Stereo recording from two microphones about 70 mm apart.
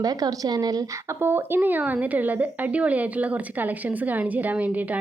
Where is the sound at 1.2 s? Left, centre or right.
Right.